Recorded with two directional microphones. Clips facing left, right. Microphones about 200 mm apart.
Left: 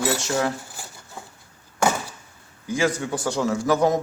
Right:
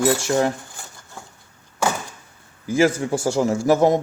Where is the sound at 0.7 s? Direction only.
5° left (ahead or behind).